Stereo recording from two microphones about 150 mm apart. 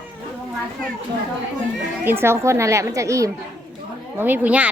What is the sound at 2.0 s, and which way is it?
A woman's voice, 15° right (ahead or behind).